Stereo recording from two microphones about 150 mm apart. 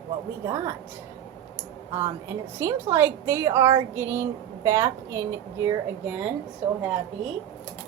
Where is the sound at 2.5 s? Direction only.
20° right (ahead or behind).